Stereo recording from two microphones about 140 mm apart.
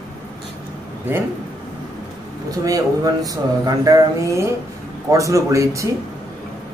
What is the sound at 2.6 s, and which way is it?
Speech, 25° right (ahead or behind).